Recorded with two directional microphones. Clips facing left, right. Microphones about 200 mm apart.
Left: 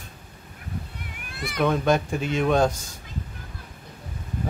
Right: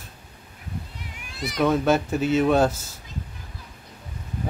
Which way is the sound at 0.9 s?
55° left (ahead or behind).